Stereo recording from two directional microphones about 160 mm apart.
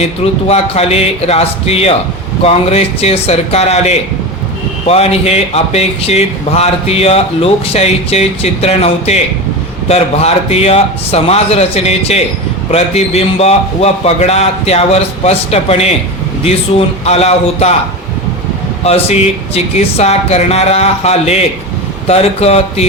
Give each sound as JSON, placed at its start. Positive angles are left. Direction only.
{"t": 0.0, "sound": "speech", "side_deg": 40}
{"t": 18.8, "sound": "speech", "side_deg": 40}